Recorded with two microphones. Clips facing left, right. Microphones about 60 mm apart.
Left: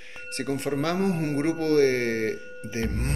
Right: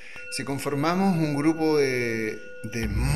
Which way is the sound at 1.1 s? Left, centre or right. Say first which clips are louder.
Right 2 dB; right.